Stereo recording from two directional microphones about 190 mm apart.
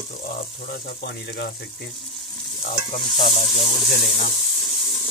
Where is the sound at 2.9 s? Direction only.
25° left (ahead or behind).